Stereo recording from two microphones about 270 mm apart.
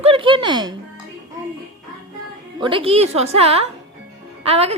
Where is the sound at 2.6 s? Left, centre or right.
Centre.